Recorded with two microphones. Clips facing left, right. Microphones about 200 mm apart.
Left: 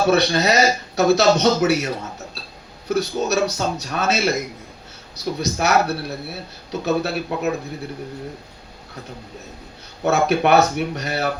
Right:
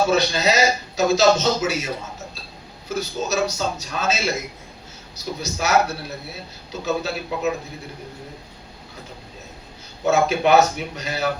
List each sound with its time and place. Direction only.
0.1 s a man's voice: 60° left (ahead or behind)
2.9 s a man's voice: 65° left (ahead or behind)
10.0 s a man's voice: 60° left (ahead or behind)